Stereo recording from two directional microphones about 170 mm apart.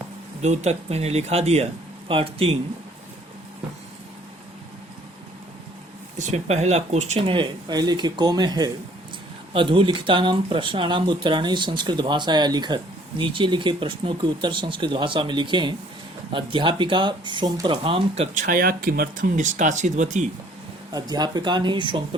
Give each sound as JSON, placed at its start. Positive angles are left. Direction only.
{"t": 0.4, "sound": "speech", "side_deg": -40}
{"t": 6.1, "sound": "speech", "side_deg": -45}
{"t": 20.9, "sound": "speech", "side_deg": -25}